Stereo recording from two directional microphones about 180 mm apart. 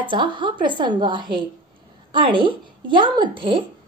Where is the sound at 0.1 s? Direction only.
25° right (ahead or behind).